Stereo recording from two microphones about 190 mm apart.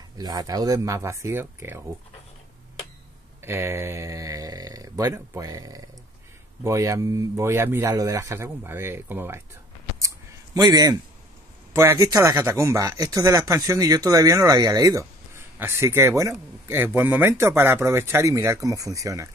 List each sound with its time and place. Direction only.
0.2 s speech: 20° right (ahead or behind)
3.4 s speech: 15° right (ahead or behind)
9.9 s a sound: 20° right (ahead or behind)
11.7 s speech: 15° right (ahead or behind)